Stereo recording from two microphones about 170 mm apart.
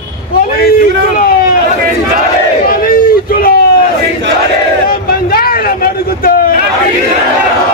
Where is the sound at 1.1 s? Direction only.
60° left (ahead or behind).